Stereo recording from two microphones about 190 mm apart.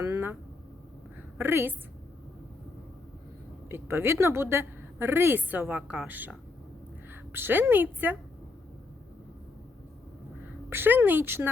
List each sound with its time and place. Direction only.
0.0 s vehicle: 15° right (ahead or behind)
1.4 s speech: 10° right (ahead or behind)
3.7 s a woman's voice: 10° right (ahead or behind)
10.7 s speech: 10° right (ahead or behind)